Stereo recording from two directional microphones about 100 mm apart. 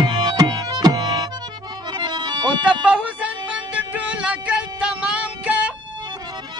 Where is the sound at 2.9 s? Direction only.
15° right (ahead or behind).